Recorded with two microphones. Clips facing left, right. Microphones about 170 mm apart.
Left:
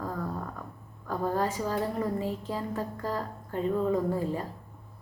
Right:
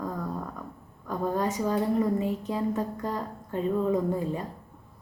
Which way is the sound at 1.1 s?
20° right (ahead or behind).